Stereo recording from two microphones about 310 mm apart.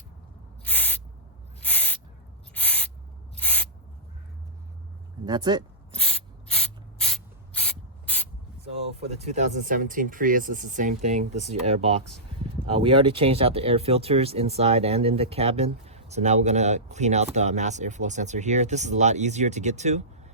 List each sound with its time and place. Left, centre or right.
0.6 s owl: centre
3.3 s spray: centre
5.2 s speech: centre
6.0 s spray: centre
9.0 s speech: right